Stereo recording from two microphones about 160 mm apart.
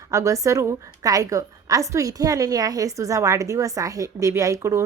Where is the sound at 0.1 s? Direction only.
20° right (ahead or behind).